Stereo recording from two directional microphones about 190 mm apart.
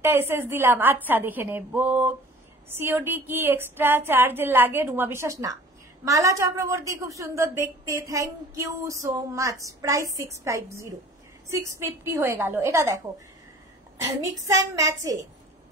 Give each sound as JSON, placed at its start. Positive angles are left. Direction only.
{"t": 0.0, "sound": "a woman's voice", "side_deg": -10}
{"t": 14.3, "sound": "a woman's voice", "side_deg": -20}